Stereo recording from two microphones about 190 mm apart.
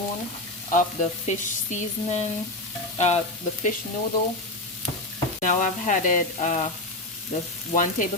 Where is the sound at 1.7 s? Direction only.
35° left (ahead or behind).